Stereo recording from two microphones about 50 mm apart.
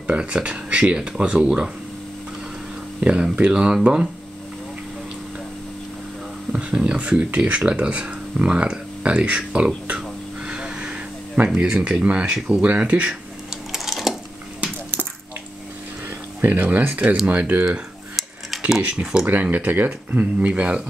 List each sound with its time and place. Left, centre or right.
0.0 s speech: right
3.0 s a sound: centre
3.4 s speech: right
6.5 s speech: right
9.8 s a sound: centre
12.4 s speech: right
13.7 s sewing machine: centre
16.3 s speech: right
18.8 s speech: right
19.4 s speech: right